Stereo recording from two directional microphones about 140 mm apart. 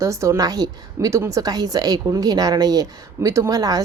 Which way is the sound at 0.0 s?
20° right (ahead or behind).